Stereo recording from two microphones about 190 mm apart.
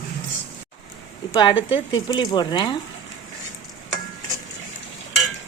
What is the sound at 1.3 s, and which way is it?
A woman's voice, 25° left (ahead or behind).